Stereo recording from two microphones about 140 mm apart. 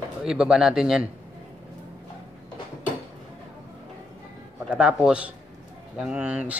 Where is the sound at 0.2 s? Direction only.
5° right (ahead or behind).